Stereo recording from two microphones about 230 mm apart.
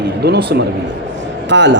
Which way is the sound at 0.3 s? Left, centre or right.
Right.